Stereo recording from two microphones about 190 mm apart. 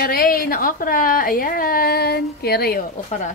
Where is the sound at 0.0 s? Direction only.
50° left (ahead or behind).